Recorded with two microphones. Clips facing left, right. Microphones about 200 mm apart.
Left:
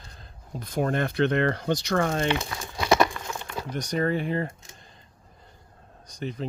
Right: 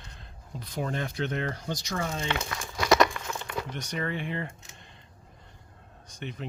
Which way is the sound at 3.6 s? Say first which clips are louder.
Left 9 dB; 40° left (ahead or behind).